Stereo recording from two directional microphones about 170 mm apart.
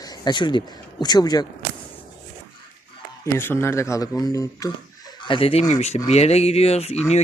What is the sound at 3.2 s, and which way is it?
A man's voice, 15° left (ahead or behind).